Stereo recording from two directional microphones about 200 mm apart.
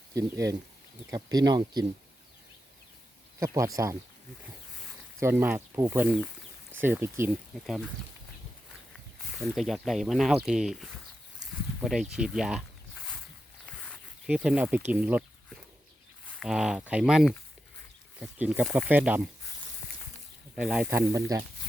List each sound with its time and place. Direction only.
0.1 s speech: 15° right (ahead or behind)
3.4 s speech: 15° right (ahead or behind)
5.2 s speech: 10° right (ahead or behind)
9.4 s speech: centre (ahead or behind)
13.7 s a sound: 5° left (ahead or behind)
14.3 s speech: 5° right (ahead or behind)
16.4 s speech: 5° right (ahead or behind)
20.6 s speech: 5° right (ahead or behind)
21.1 s speech: 15° right (ahead or behind)